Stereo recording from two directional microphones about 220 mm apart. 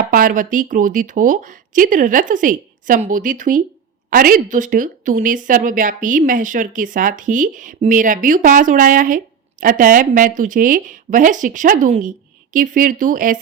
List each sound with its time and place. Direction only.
0.0 s speech: 40° right (ahead or behind)